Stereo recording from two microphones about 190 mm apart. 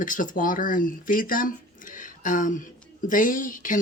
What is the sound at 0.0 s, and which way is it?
Speech, 45° left (ahead or behind).